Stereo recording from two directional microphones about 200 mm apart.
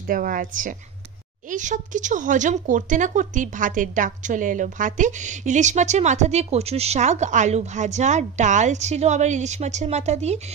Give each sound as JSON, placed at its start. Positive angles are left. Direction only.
{"t": 0.0, "sound": "a woman's voice", "side_deg": -45}